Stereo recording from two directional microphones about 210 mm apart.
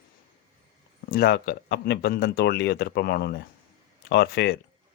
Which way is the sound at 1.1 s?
50° left (ahead or behind).